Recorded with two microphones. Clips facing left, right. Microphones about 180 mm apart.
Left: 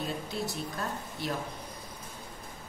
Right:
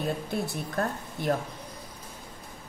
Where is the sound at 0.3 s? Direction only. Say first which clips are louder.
Right 3 dB; 55° right (ahead or behind).